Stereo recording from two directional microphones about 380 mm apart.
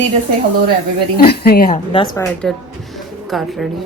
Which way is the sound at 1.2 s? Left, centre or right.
Left.